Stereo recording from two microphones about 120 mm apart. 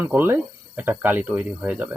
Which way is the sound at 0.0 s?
15° right (ahead or behind).